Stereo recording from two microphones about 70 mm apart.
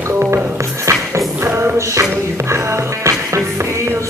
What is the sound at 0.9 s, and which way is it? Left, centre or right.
Music, right.